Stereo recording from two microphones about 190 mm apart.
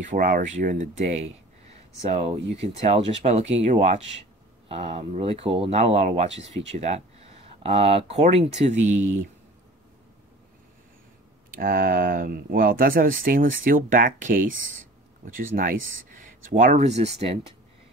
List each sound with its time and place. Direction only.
0.1 s speech: 45° right (ahead or behind)
11.5 s speech: 50° right (ahead or behind); by 17.4 s 35° right (ahead or behind)